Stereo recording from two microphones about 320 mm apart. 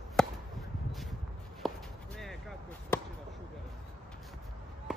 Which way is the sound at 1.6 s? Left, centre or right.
Centre.